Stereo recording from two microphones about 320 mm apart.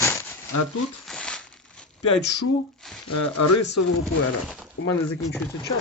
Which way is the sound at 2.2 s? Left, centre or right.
Left.